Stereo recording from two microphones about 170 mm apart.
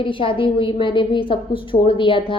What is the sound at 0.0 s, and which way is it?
A woman's voice, 30° left (ahead or behind).